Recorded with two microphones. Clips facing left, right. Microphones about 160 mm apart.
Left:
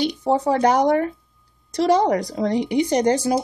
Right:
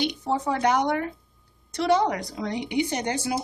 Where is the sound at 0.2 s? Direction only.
35° left (ahead or behind).